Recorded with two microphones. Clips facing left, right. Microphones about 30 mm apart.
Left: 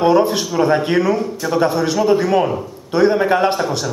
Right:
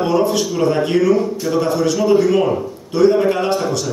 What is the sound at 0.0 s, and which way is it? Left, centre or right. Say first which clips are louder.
A man's voice: left 2 dB; left.